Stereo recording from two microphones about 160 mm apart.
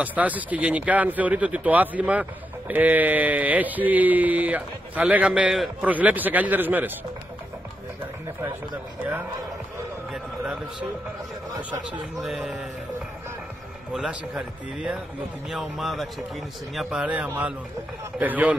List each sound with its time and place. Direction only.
0.0 s speech: 10° right (ahead or behind)
10.1 s a man's voice: 5° right (ahead or behind)
11.5 s speech: 30° right (ahead or behind)
12.2 s a man's voice: centre (ahead or behind)
13.9 s a man's voice: 5° right (ahead or behind)